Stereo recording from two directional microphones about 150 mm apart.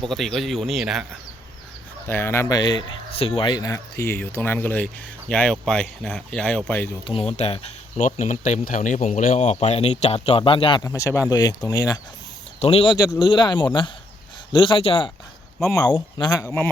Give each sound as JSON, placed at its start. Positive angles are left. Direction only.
{"t": 0.1, "sound": "speech", "side_deg": 0}
{"t": 2.0, "sound": "speech", "side_deg": 15}
{"t": 2.6, "sound": "speech", "side_deg": 30}
{"t": 7.0, "sound": "speech", "side_deg": 40}
{"t": 10.8, "sound": "speech", "side_deg": 20}
{"t": 12.5, "sound": "speech", "side_deg": 40}
{"t": 15.7, "sound": "speech", "side_deg": 25}
{"t": 16.4, "sound": "speech", "side_deg": 15}